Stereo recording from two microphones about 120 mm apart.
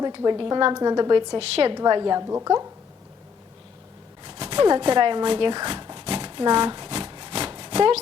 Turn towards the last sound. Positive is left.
turn(degrees=-50)  # may be behind; listen again after turning